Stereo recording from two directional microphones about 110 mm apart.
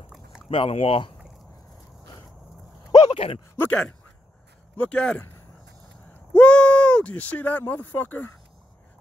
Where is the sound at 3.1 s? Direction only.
55° left (ahead or behind).